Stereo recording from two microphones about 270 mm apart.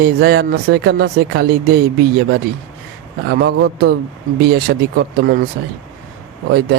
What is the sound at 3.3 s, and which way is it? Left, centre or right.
Speech, right.